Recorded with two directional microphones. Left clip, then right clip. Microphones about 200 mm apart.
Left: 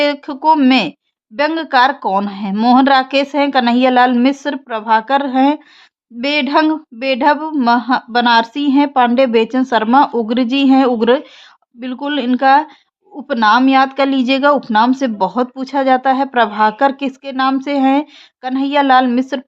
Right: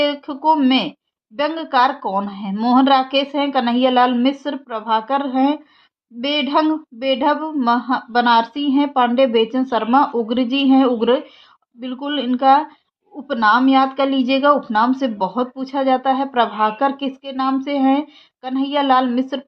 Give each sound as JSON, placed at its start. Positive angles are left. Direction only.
{"t": 0.0, "sound": "a woman's voice", "side_deg": 40}